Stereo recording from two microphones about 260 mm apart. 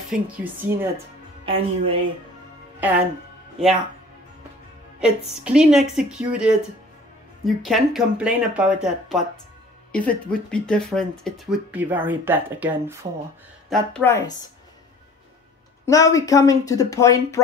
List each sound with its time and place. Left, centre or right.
0.1 s speech: centre
1.4 s a woman's voice: right
3.6 s speech: centre
5.4 s speech: centre
13.7 s speech: centre
15.8 s speech: centre